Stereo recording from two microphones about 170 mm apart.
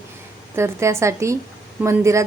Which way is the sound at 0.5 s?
15° right (ahead or behind).